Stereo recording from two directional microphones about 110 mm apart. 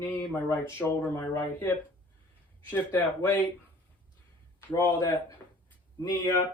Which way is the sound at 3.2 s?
20° left (ahead or behind).